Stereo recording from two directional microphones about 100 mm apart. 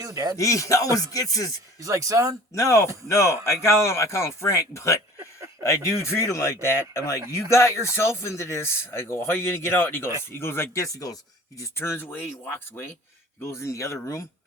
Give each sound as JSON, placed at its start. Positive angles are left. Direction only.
{"t": 0.0, "sound": "speech", "side_deg": -35}
{"t": 0.3, "sound": "speech", "side_deg": 35}
{"t": 1.8, "sound": "speech", "side_deg": -35}
{"t": 2.6, "sound": "speech", "side_deg": 30}
{"t": 2.8, "sound": "speech", "side_deg": -30}
{"t": 3.1, "sound": "speech", "side_deg": 30}
{"t": 13.4, "sound": "speech", "side_deg": 30}